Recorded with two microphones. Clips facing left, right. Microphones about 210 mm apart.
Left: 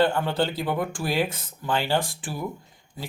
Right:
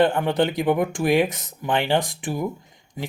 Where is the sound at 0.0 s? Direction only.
15° right (ahead or behind).